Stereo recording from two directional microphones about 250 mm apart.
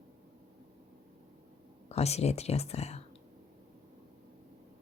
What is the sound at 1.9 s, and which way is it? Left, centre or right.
Speech, left.